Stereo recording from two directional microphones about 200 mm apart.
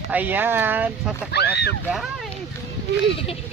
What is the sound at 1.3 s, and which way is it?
Speech, 55° left (ahead or behind).